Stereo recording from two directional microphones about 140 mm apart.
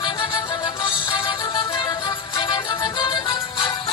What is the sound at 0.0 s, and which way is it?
Music, 35° left (ahead or behind).